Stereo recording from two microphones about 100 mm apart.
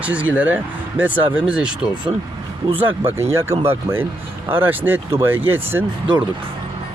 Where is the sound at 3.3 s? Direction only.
25° right (ahead or behind).